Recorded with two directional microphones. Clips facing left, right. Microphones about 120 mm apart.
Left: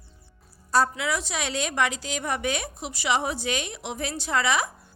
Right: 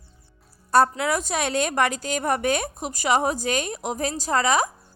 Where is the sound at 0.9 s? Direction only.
45° right (ahead or behind).